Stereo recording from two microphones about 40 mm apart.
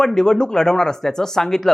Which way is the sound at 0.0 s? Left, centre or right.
Centre.